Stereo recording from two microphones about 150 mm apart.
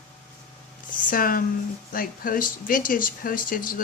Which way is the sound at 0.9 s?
65° left (ahead or behind).